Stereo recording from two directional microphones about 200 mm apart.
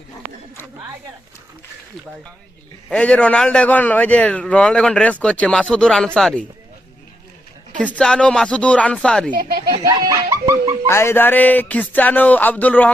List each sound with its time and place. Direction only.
2.9 s a man's voice: 5° left (ahead or behind)
7.8 s a man's voice: 5° left (ahead or behind)
9.3 s speech: 45° right (ahead or behind)
9.6 s laughter: 20° right (ahead or behind)
10.8 s speech: 15° left (ahead or behind)